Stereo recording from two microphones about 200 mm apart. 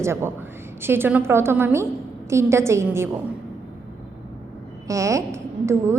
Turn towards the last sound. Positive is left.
turn(degrees=-15)  # may be behind; listen again after turning